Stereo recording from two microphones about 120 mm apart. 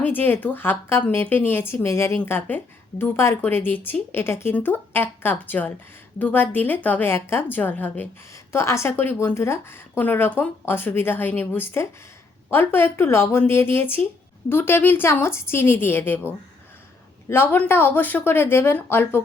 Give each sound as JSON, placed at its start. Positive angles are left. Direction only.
{"t": 0.0, "sound": "a woman's voice", "side_deg": 15}